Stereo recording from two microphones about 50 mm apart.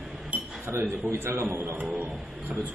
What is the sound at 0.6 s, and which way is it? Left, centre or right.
A man's voice, right.